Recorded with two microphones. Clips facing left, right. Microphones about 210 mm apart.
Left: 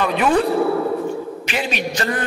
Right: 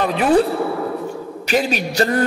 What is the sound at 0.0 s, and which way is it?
Speech, 35° right (ahead or behind).